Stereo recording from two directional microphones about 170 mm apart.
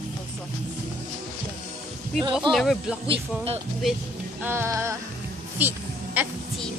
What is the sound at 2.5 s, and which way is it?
Speech, centre (ahead or behind).